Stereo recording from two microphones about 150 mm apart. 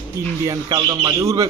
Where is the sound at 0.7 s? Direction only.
25° right (ahead or behind).